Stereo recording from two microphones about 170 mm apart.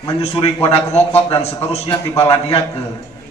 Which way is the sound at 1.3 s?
35° left (ahead or behind).